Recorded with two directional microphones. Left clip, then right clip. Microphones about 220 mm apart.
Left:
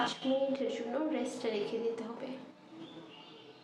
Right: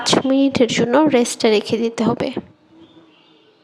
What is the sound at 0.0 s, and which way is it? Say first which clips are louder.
A woman's voice: right 16 dB; 50° right (ahead or behind).